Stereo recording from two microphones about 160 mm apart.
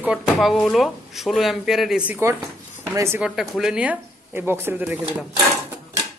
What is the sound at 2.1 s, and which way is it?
Speech, 15° right (ahead or behind).